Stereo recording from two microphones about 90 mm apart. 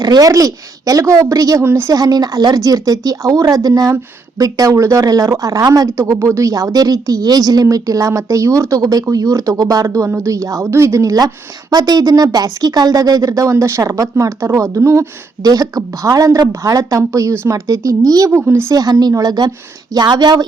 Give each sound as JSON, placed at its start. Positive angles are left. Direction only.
{"t": 0.0, "sound": "a woman's voice", "side_deg": -40}
{"t": 1.6, "sound": "a woman's voice", "side_deg": -25}
{"t": 1.9, "sound": "a woman's voice", "side_deg": -45}
{"t": 15.4, "sound": "a woman's voice", "side_deg": -45}
{"t": 18.4, "sound": "a woman's voice", "side_deg": -25}
{"t": 18.7, "sound": "speech", "side_deg": -45}